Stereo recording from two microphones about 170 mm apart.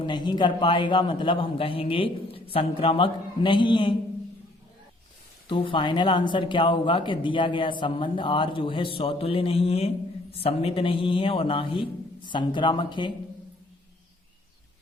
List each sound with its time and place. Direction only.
0.0 s speech: 25° left (ahead or behind)
5.5 s a man's voice: 30° left (ahead or behind)